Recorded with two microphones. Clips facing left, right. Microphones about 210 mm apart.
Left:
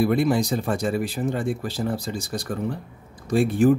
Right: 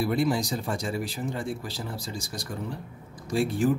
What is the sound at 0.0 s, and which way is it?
Speech, 55° left (ahead or behind).